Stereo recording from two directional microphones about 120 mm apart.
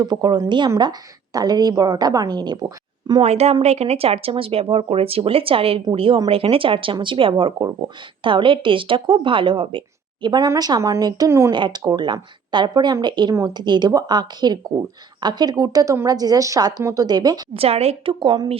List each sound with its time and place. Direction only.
0.0 s a woman's voice: 35° right (ahead or behind)
3.2 s a woman's voice: 60° right (ahead or behind); by 11.5 s 25° right (ahead or behind)
11.5 s a woman's voice: 40° right (ahead or behind)
17.5 s speech: 55° right (ahead or behind)